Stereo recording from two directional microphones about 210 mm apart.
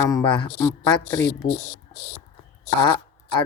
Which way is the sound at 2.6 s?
20° left (ahead or behind).